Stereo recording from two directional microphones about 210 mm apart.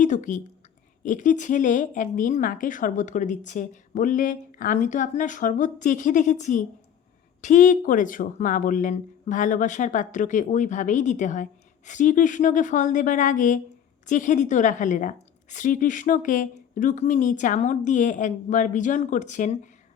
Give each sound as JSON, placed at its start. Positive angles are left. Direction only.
{"t": 0.0, "sound": "speech", "side_deg": 35}